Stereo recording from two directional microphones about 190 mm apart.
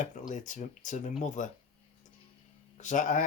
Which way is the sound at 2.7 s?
40° left (ahead or behind).